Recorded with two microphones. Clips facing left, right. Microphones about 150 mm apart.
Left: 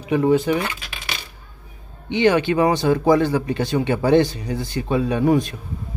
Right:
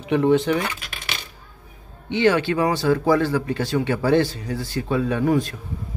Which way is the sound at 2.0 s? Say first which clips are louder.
Left 2 dB; 20° left (ahead or behind).